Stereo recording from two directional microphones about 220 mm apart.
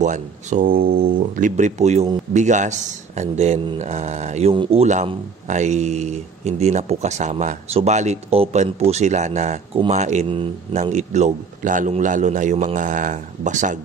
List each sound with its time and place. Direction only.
0.0 s speech: 35° right (ahead or behind)